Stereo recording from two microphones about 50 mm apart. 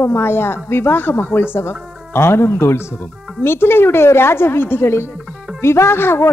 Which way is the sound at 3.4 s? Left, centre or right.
Left.